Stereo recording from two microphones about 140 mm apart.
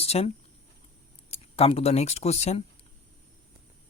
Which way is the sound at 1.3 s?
45° left (ahead or behind).